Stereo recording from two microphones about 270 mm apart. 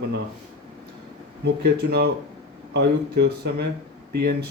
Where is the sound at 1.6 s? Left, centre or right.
Right.